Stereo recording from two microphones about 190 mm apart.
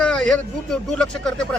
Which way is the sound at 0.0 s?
5° left (ahead or behind).